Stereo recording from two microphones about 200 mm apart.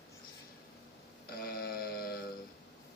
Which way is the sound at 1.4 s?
45° left (ahead or behind).